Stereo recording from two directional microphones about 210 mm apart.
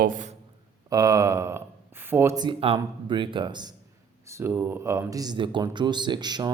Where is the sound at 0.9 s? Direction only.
15° right (ahead or behind).